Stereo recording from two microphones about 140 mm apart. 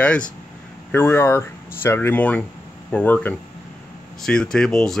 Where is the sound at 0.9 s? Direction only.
15° left (ahead or behind).